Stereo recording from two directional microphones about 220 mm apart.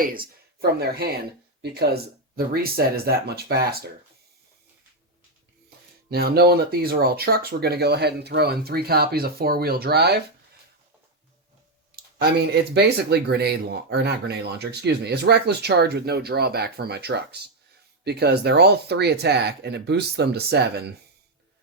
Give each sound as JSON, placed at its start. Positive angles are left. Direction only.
{"t": 0.0, "sound": "speech", "side_deg": -40}
{"t": 6.1, "sound": "speech", "side_deg": -45}
{"t": 12.7, "sound": "speech", "side_deg": -50}